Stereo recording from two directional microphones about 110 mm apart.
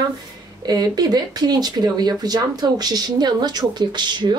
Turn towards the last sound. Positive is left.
turn(degrees=-40)  # may be behind; listen again after turning